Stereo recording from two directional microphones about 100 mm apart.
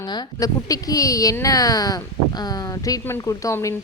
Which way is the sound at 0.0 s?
40° left (ahead or behind).